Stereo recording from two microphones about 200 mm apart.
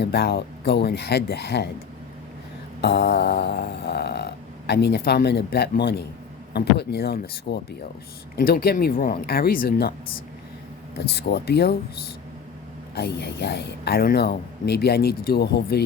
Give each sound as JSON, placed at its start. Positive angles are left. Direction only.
{"t": 0.0, "sound": "snoring", "side_deg": 55}
{"t": 2.8, "sound": "snoring", "side_deg": 55}
{"t": 8.4, "sound": "speech", "side_deg": 45}
{"t": 10.9, "sound": "snoring", "side_deg": 55}
{"t": 12.9, "sound": "speech", "side_deg": 55}